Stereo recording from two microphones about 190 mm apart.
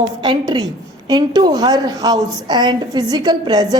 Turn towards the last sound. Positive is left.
turn(degrees=-20)  # may be behind; listen again after turning